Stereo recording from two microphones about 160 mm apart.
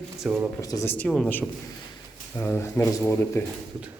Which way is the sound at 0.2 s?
5° right (ahead or behind).